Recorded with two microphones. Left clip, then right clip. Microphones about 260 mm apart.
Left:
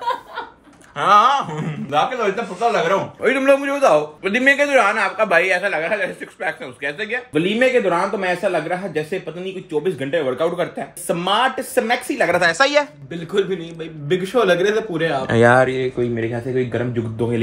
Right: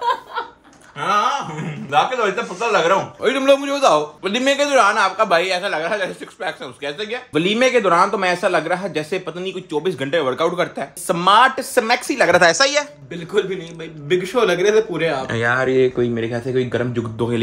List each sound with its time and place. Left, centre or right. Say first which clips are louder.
0.9 s speech: left 5 dB; centre
1.9 s a man's voice: right 2 dB; centre
12.3 s a woman's voice: right 4 dB; right
12.5 s speech: left 1 dB; centre
16.0 s a man's voice: right 1 dB; centre